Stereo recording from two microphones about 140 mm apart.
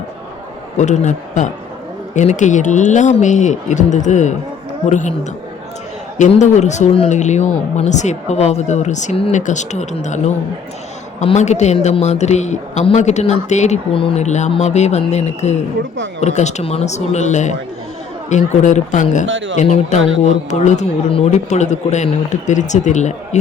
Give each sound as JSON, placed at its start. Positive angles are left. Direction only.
{"t": 0.8, "sound": "speech", "side_deg": 60}
{"t": 6.3, "sound": "a woman's voice", "side_deg": 55}
{"t": 13.9, "sound": "speech", "side_deg": 40}
{"t": 14.3, "sound": "a woman's voice", "side_deg": 55}